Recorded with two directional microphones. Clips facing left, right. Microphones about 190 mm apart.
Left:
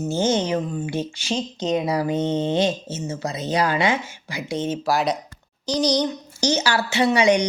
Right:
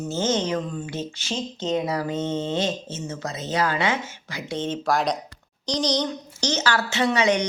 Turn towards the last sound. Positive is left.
turn(degrees=10)  # may be behind; listen again after turning